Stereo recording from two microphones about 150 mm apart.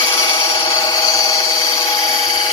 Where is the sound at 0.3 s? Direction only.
30° left (ahead or behind).